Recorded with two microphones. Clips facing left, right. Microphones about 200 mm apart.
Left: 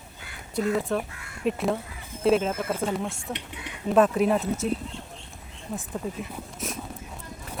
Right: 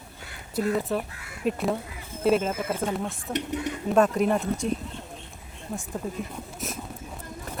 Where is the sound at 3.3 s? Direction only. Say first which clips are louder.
Right 7 dB; 45° right (ahead or behind).